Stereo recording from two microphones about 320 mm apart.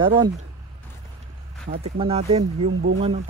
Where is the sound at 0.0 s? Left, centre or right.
Centre.